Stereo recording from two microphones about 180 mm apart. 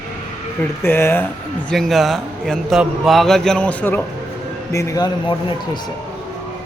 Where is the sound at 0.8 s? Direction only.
15° left (ahead or behind).